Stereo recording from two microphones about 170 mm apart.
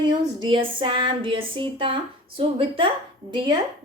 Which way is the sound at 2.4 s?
30° right (ahead or behind).